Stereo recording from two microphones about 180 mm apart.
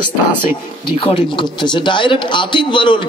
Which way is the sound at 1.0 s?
30° left (ahead or behind).